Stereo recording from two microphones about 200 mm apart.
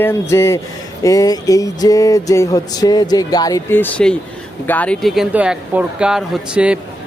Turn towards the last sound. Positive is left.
turn(degrees=-5)  # may be behind; listen again after turning